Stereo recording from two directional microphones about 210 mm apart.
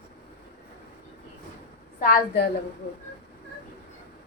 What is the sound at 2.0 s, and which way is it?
Speech, 45° left (ahead or behind).